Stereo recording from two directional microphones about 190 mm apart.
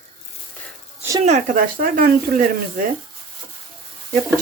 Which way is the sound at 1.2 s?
40° right (ahead or behind).